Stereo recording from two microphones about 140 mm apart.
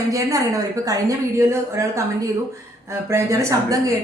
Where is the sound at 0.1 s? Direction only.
25° right (ahead or behind).